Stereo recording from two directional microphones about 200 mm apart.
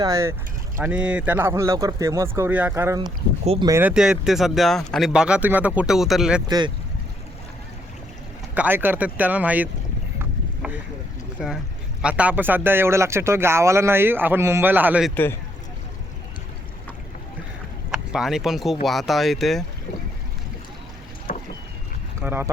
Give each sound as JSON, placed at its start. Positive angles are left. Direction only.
{"t": 0.0, "sound": "speech", "side_deg": -15}
{"t": 3.4, "sound": "speech", "side_deg": -30}
{"t": 3.7, "sound": "speech", "side_deg": -10}
{"t": 8.5, "sound": "speech", "side_deg": -10}
{"t": 11.3, "sound": "speech", "side_deg": -5}
{"t": 15.1, "sound": "a man's voice", "side_deg": 10}
{"t": 17.9, "sound": "speech", "side_deg": -5}
{"t": 21.3, "sound": "rowboat", "side_deg": 40}
{"t": 22.2, "sound": "speech", "side_deg": -10}